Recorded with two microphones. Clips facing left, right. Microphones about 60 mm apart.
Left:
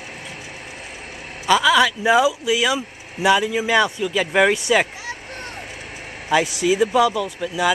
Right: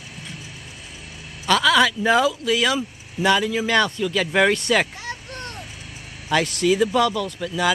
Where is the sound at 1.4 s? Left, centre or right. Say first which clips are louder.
Left 2 dB; centre.